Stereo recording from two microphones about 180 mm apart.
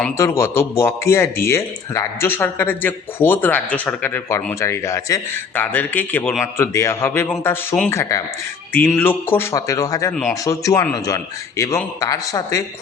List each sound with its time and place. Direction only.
0.2 s speech: 15° left (ahead or behind)
10.1 s speech: 5° left (ahead or behind)
10.4 s a man's voice: 20° left (ahead or behind)